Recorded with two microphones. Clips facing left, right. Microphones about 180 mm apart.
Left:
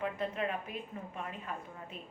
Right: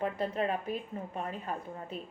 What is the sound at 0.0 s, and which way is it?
A woman's voice, 35° right (ahead or behind).